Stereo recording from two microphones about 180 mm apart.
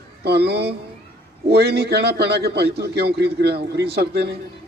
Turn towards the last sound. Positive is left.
turn(degrees=-65)  # may be behind; listen again after turning